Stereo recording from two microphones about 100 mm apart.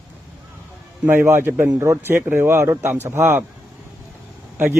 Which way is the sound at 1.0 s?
25° right (ahead or behind).